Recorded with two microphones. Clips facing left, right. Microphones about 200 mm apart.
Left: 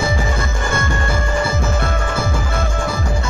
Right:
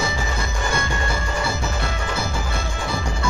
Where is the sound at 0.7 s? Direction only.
55° left (ahead or behind).